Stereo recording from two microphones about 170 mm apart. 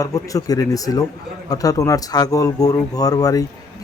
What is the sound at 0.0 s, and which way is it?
Speech, 20° left (ahead or behind).